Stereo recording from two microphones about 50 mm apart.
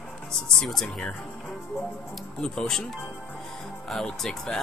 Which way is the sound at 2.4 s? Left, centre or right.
Centre.